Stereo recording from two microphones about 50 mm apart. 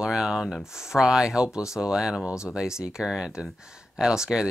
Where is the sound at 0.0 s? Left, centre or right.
Centre.